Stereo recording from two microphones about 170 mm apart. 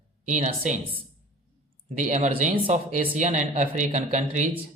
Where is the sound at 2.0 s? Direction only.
45° right (ahead or behind).